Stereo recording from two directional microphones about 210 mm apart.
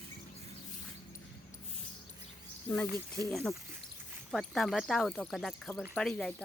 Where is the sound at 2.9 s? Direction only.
15° right (ahead or behind).